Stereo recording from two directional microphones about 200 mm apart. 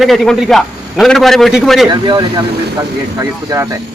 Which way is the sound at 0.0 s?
Centre (ahead or behind).